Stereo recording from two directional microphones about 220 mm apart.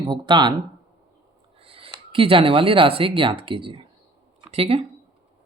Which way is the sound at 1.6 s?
25° right (ahead or behind).